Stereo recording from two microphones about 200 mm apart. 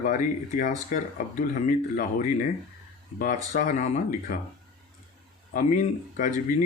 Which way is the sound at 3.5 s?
40° left (ahead or behind).